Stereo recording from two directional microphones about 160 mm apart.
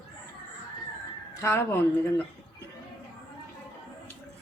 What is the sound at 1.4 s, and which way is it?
Speech, 15° left (ahead or behind).